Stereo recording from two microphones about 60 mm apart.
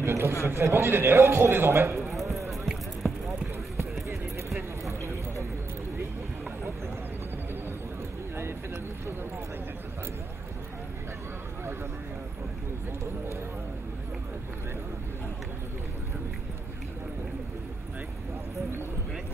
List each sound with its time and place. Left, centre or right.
0.0 s a man's voice: right
2.0 s clip-clop: centre
2.6 s music: centre
5.0 s a sound: right